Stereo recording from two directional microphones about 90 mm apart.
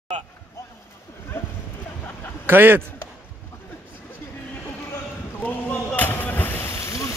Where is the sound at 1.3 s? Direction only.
25° left (ahead or behind).